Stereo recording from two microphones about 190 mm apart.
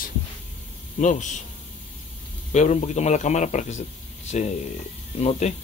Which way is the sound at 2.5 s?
40° left (ahead or behind).